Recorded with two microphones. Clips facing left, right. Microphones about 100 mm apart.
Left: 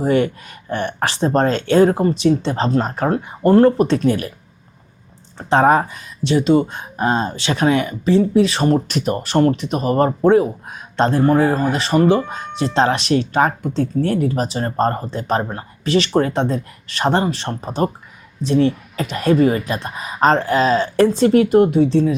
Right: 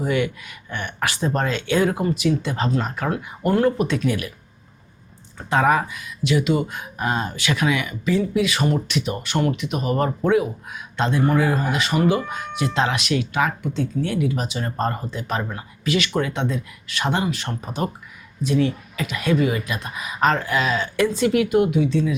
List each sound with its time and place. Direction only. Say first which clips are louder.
0.0 s speech: left 6 dB; 35° left (ahead or behind)
5.4 s speech: left 5 dB; 35° left (ahead or behind)